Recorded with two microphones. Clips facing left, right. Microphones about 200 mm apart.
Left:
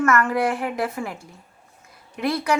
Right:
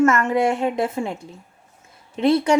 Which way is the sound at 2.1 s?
25° right (ahead or behind).